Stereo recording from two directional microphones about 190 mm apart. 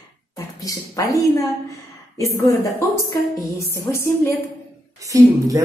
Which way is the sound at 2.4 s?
15° left (ahead or behind).